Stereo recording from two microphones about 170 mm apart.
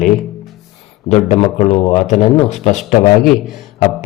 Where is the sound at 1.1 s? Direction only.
40° left (ahead or behind).